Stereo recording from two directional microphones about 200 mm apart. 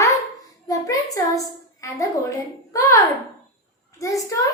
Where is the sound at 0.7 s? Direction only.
15° left (ahead or behind).